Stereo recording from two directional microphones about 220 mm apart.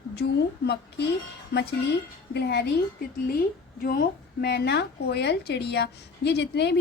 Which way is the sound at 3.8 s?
45° left (ahead or behind).